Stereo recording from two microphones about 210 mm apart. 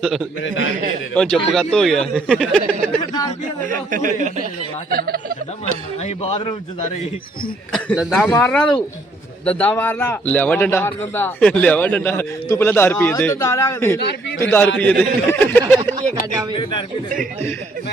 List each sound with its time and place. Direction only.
0.4 s a man's voice: 65° left (ahead or behind)
1.1 s speech: 5° left (ahead or behind)
3.1 s speech: 20° left (ahead or behind)
3.7 s speech: 40° right (ahead or behind)
6.0 s speech: 30° left (ahead or behind)
7.7 s a man's voice: centre (ahead or behind)
14.0 s a man's voice: 55° left (ahead or behind)
14.5 s a man's voice: 10° left (ahead or behind)